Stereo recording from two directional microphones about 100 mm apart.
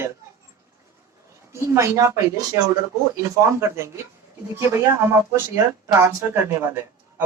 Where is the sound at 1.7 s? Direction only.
30° right (ahead or behind).